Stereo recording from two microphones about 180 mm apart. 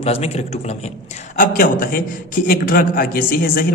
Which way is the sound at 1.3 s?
55° left (ahead or behind).